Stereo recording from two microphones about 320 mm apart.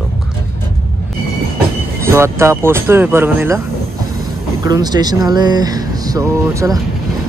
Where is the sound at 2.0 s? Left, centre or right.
Centre.